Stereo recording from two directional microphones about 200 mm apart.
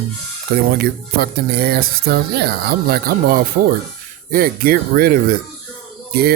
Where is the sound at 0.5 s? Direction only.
50° right (ahead or behind).